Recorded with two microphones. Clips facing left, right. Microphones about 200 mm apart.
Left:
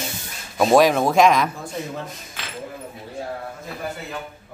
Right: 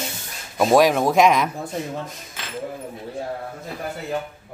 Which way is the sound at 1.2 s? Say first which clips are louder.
Left 1 dB; 20° right (ahead or behind).